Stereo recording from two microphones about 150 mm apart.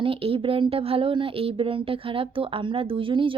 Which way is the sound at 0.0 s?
35° right (ahead or behind).